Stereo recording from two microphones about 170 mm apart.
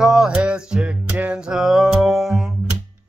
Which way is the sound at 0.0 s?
Centre (ahead or behind).